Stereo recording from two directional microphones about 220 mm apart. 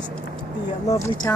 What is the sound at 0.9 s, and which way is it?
Speech, 15° left (ahead or behind).